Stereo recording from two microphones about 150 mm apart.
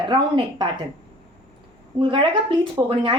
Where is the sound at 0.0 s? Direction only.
30° right (ahead or behind).